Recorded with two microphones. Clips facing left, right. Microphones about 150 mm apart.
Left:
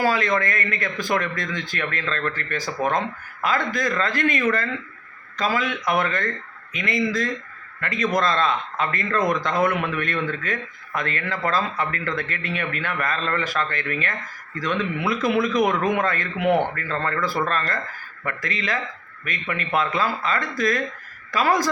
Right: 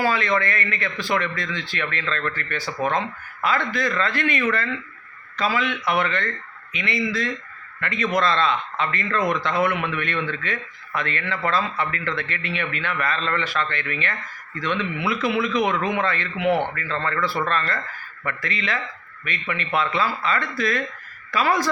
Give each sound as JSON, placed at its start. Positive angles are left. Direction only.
{"t": 0.0, "sound": "a man's voice", "side_deg": 40}